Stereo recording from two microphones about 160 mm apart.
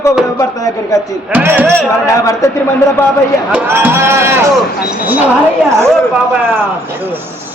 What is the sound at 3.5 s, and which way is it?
Speech, 10° right (ahead or behind).